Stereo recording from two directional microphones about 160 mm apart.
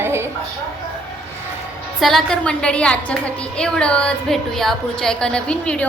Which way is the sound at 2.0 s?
Centre (ahead or behind).